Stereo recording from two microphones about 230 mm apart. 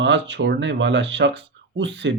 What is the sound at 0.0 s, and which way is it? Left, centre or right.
Speech, right.